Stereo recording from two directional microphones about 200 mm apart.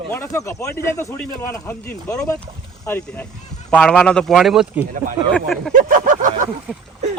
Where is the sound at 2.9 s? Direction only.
10° left (ahead or behind).